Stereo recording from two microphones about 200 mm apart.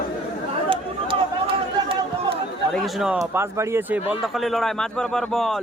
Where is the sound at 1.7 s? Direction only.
25° right (ahead or behind).